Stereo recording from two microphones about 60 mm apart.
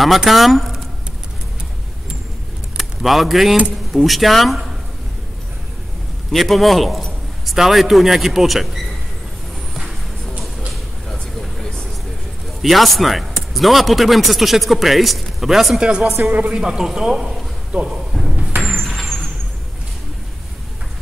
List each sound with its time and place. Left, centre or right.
0.3 s speech: centre
2.8 s speech: centre
6.3 s speech: centre
10.7 s vehicle: centre
12.6 s speech: centre
16.2 s a woman's voice: right
16.5 s speech: centre
18.1 s a sound: centre
18.7 s squeal: centre